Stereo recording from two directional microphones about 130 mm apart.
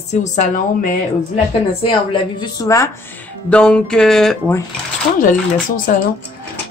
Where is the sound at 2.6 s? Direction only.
25° left (ahead or behind).